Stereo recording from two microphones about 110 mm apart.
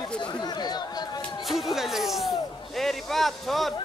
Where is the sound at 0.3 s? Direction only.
40° left (ahead or behind).